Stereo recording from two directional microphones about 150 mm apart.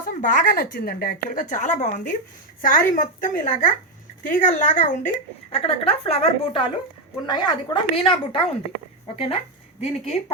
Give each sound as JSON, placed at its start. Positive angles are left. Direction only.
{"t": 0.0, "sound": "a woman's voice", "side_deg": 60}
{"t": 5.5, "sound": "a woman's voice", "side_deg": 45}